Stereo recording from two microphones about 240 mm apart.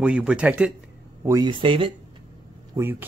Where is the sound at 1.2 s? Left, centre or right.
Centre.